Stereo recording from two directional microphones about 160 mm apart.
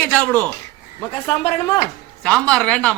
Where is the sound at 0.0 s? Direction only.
10° left (ahead or behind).